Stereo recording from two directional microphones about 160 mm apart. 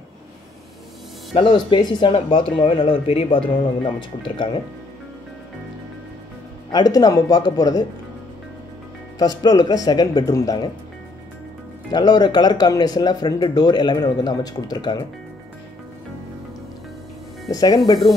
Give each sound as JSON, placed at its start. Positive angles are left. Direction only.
{"t": 1.3, "sound": "speech", "side_deg": 30}
{"t": 6.7, "sound": "speech", "side_deg": 25}
{"t": 9.2, "sound": "speech", "side_deg": 25}
{"t": 11.9, "sound": "speech", "side_deg": 25}
{"t": 17.5, "sound": "speech", "side_deg": 25}